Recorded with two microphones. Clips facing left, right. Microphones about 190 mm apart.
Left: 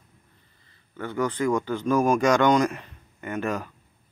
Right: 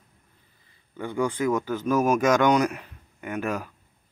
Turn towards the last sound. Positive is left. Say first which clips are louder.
# left 1 dB
turn(degrees=-10)  # may be behind; listen again after turning